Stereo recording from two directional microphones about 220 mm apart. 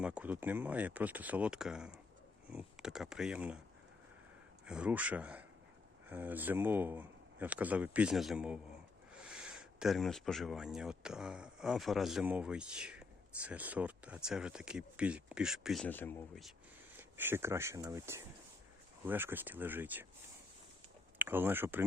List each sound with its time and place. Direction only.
0.0 s speech: 5° right (ahead or behind)
4.6 s speech: 5° right (ahead or behind)
17.0 s speech: 10° right (ahead or behind)
21.2 s speech: 10° right (ahead or behind)